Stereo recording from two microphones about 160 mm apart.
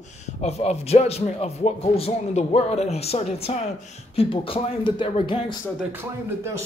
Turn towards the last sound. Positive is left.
turn(degrees=35)  # may be behind; listen again after turning